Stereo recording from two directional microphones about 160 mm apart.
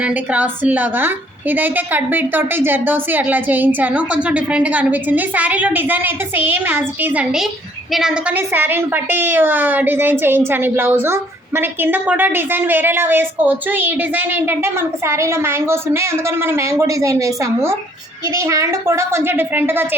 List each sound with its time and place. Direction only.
0.0 s a woman's voice: 10° right (ahead or behind)